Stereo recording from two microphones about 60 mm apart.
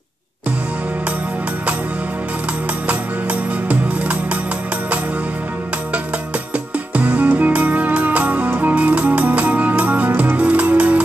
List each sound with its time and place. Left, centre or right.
2.9 s music: right
6.9 s music: right